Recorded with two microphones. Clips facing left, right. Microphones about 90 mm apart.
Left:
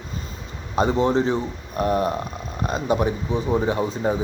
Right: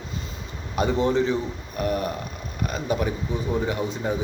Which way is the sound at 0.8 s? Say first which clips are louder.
Left 2 dB; 35° left (ahead or behind).